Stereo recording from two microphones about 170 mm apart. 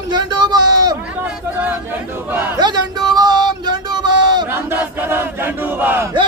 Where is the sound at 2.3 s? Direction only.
10° right (ahead or behind).